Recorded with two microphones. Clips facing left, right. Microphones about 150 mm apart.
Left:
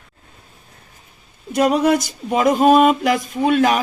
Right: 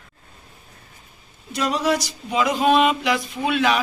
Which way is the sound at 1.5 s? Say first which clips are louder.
Left 6 dB; 55° left (ahead or behind).